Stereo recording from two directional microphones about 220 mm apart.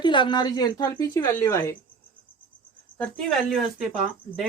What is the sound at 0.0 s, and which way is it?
Speech, 20° left (ahead or behind).